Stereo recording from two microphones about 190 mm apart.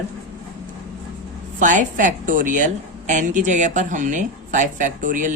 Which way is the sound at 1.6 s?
40° right (ahead or behind).